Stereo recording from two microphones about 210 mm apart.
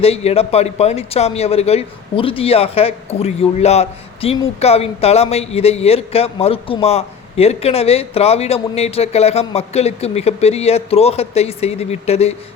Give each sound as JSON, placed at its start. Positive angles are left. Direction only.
{"t": 0.0, "sound": "speech", "side_deg": 30}